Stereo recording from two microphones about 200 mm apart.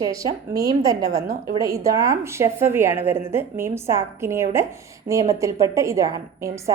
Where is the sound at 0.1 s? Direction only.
15° right (ahead or behind).